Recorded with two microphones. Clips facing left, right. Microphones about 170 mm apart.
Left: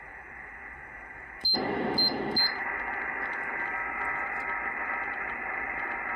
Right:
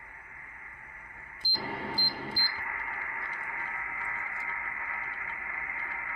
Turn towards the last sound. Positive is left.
turn(degrees=55)  # may be behind; listen again after turning